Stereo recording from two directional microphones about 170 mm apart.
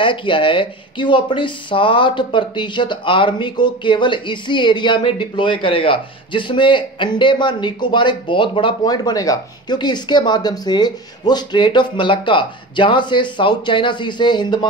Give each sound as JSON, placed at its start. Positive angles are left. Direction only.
{"t": 0.0, "sound": "speech", "side_deg": 30}